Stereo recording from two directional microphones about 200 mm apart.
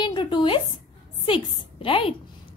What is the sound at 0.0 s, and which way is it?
A woman's voice, 25° left (ahead or behind).